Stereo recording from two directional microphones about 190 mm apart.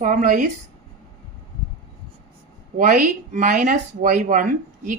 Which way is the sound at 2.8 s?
45° right (ahead or behind).